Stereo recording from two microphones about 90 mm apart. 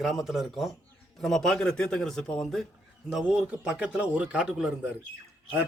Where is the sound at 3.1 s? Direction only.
5° right (ahead or behind).